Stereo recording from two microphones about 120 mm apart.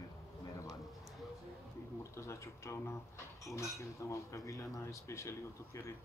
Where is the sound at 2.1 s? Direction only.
25° left (ahead or behind).